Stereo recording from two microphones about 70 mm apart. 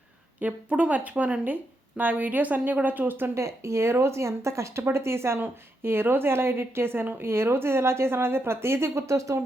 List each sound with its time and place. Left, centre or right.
0.3 s speech: right
3.3 s speech: right